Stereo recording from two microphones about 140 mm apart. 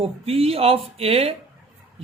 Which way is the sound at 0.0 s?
45° right (ahead or behind).